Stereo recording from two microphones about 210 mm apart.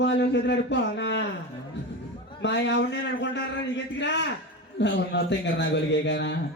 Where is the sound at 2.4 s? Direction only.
60° left (ahead or behind).